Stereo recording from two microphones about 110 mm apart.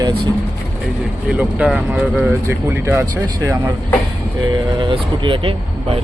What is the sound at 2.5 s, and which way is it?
Speech, 20° right (ahead or behind).